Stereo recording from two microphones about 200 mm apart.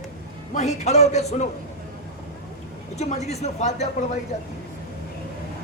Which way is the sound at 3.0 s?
35° left (ahead or behind).